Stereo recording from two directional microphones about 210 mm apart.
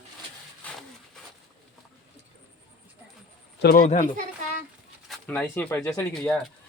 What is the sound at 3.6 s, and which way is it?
Speech, 45° left (ahead or behind).